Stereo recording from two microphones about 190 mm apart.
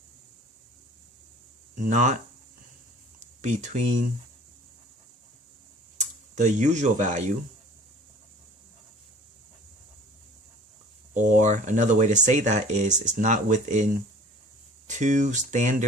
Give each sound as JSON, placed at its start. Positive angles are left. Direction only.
{"t": 1.7, "sound": "speech", "side_deg": -40}
{"t": 3.2, "sound": "speech", "side_deg": -40}
{"t": 6.0, "sound": "speech", "side_deg": -40}
{"t": 11.1, "sound": "speech", "side_deg": -40}